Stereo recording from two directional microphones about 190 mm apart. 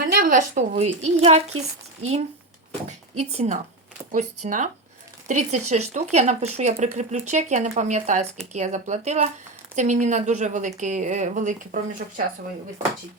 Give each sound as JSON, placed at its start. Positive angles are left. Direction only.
{"t": 0.2, "sound": "speech", "side_deg": -45}
{"t": 1.5, "sound": "speech", "side_deg": -90}
{"t": 3.3, "sound": "speech", "side_deg": -35}